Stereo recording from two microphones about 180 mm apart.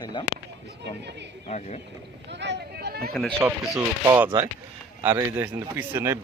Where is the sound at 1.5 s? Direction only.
40° left (ahead or behind).